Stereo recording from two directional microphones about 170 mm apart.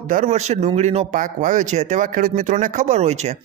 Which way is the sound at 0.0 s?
50° right (ahead or behind).